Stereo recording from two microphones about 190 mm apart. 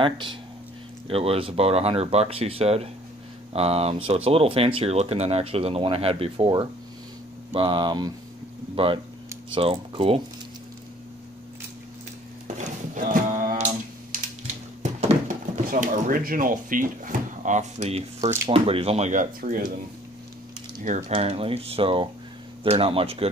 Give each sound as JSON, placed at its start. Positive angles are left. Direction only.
{"t": 0.0, "sound": "speech", "side_deg": -25}
{"t": 12.5, "sound": "horse", "side_deg": -45}
{"t": 14.8, "sound": "a sound", "side_deg": -40}
{"t": 18.5, "sound": "speech", "side_deg": -30}
{"t": 21.1, "sound": "speech", "side_deg": -30}